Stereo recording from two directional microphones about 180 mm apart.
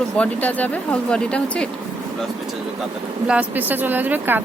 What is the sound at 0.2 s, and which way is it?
Speech, 10° left (ahead or behind).